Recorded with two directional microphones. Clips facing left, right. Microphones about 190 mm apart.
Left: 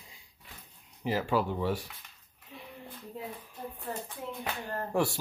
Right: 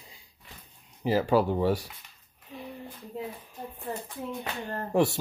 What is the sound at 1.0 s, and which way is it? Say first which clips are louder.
Speech: right 5 dB; 35° right (ahead or behind).